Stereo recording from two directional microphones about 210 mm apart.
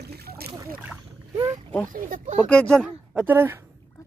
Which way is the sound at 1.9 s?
40° right (ahead or behind).